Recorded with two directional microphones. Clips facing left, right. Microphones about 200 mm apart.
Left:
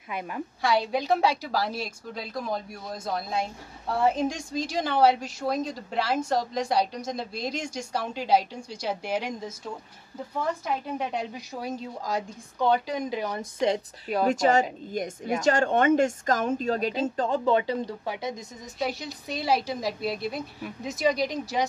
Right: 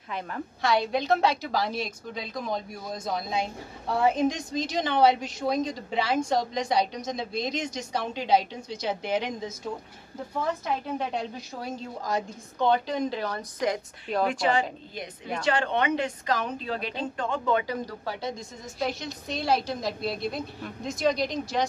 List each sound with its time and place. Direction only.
0.1 s a woman's voice: 10° left (ahead or behind)
11.0 s a woman's voice: 15° left (ahead or behind)
14.2 s a woman's voice: 45° left (ahead or behind); by 18.3 s 20° left (ahead or behind)
18.8 s a woman's voice: 10° left (ahead or behind)